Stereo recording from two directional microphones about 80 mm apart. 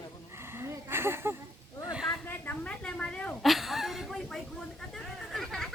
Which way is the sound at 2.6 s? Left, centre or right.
Centre.